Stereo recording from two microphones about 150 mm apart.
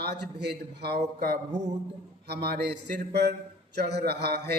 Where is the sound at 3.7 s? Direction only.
90° right.